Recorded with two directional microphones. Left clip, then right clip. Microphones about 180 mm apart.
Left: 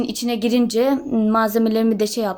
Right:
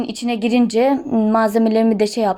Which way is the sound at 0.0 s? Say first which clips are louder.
Right 1 dB; 10° right (ahead or behind).